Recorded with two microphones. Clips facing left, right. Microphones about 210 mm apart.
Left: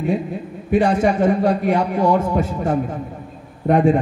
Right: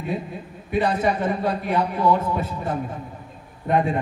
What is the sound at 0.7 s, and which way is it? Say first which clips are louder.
A man's voice: left 5 dB; 50° left (ahead or behind).